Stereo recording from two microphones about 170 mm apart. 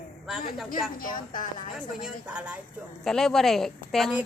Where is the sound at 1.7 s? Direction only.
5° right (ahead or behind).